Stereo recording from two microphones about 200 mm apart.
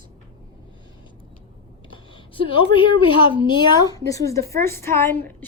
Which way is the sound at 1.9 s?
25° left (ahead or behind).